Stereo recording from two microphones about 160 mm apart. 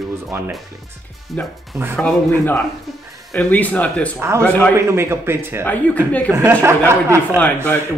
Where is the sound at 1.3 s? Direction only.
10° left (ahead or behind).